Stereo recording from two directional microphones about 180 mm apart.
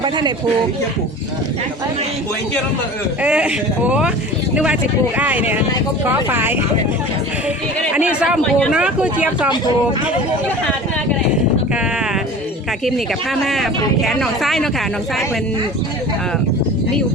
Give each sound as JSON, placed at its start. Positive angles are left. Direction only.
{"t": 0.0, "sound": "speech", "side_deg": -25}
{"t": 3.2, "sound": "speech", "side_deg": -5}
{"t": 7.9, "sound": "speech", "side_deg": -5}
{"t": 13.4, "sound": "speech", "side_deg": 0}